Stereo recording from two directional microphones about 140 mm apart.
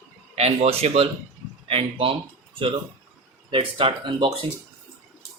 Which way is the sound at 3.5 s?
40° right (ahead or behind).